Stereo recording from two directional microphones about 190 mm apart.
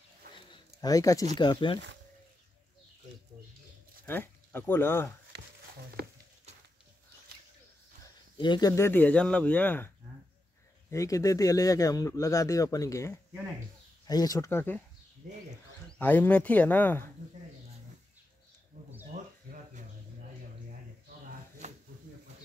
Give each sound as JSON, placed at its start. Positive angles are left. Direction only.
{"t": 0.7, "sound": "speech", "side_deg": 20}
{"t": 4.0, "sound": "speech", "side_deg": 10}
{"t": 8.4, "sound": "speech", "side_deg": 20}
{"t": 15.9, "sound": "speech", "side_deg": 10}